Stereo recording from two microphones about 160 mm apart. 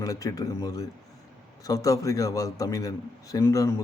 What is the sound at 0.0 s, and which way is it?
A man's voice, 20° left (ahead or behind).